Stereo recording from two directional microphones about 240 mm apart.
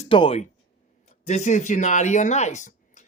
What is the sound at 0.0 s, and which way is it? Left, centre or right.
Speech, left.